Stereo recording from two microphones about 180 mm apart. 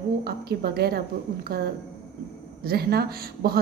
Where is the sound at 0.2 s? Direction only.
60° right (ahead or behind).